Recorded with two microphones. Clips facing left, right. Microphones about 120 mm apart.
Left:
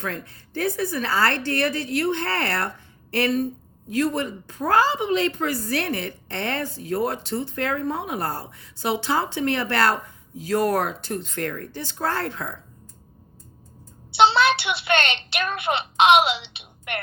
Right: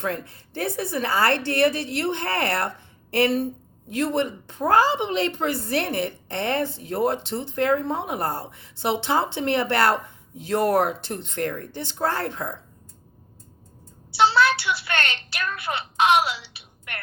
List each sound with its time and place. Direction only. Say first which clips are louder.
0.0 s a woman's voice: right 3 dB; 25° right (ahead or behind)
14.2 s speech: left 1 dB; 25° left (ahead or behind)